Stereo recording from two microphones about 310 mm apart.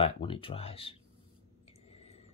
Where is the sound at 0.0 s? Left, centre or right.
Centre.